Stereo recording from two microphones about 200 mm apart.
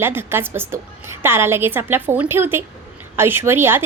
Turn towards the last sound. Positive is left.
turn(degrees=-10)  # may be behind; listen again after turning